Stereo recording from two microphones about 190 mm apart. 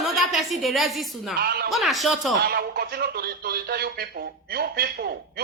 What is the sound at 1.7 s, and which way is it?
Speech, centre (ahead or behind).